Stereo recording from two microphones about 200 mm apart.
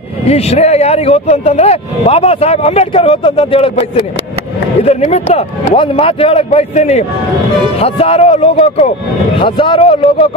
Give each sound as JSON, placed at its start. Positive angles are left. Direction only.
{"t": 0.3, "sound": "speech", "side_deg": 30}
{"t": 4.8, "sound": "speech", "side_deg": 30}
{"t": 9.4, "sound": "speech", "side_deg": 25}